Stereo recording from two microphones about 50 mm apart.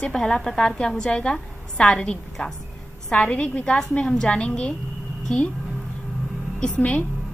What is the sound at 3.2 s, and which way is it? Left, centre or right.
A woman's voice, left.